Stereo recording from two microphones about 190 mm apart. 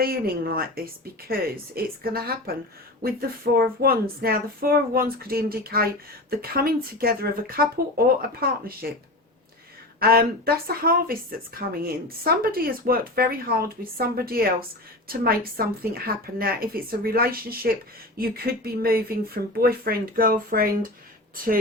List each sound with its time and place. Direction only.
0.0 s speech: 50° right (ahead or behind)
10.0 s speech: 50° right (ahead or behind)